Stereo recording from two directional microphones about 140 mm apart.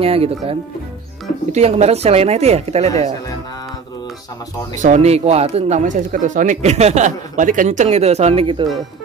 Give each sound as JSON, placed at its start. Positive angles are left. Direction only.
{"t": 0.0, "sound": "speech", "side_deg": -45}
{"t": 4.8, "sound": "speech", "side_deg": -55}